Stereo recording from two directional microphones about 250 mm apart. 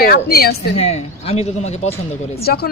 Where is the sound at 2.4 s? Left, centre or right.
Left.